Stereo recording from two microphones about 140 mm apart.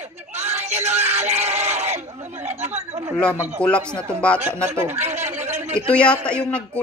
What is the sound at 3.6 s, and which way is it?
Speech, 10° left (ahead or behind).